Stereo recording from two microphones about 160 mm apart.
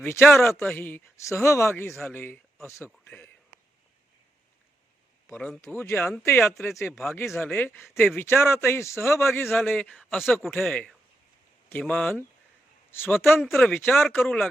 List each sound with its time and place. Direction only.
0.0 s a man's voice: 15° left (ahead or behind)
1.9 s speech: 5° left (ahead or behind)
5.3 s a man's voice: 5° left (ahead or behind)
6.9 s a man's voice: centre (ahead or behind)
13.4 s speech: centre (ahead or behind)